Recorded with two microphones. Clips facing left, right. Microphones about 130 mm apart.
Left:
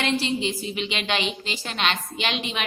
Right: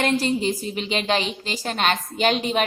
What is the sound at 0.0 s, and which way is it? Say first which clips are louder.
A woman's voice: right 3 dB; 45° right (ahead or behind).